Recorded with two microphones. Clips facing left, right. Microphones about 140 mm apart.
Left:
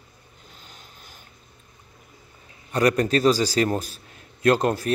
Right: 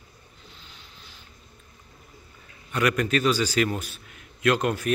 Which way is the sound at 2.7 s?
35° left (ahead or behind).